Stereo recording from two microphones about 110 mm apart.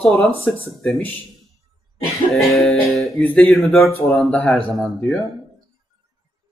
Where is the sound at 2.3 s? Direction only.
Centre (ahead or behind).